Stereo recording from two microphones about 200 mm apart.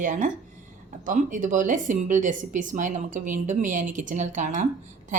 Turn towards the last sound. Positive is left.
turn(degrees=-40)  # may be behind; listen again after turning